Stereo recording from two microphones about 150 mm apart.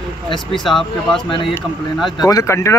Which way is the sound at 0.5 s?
Centre (ahead or behind).